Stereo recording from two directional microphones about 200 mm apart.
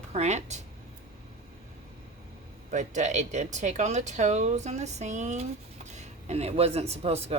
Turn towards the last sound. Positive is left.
turn(degrees=-30)  # may be behind; listen again after turning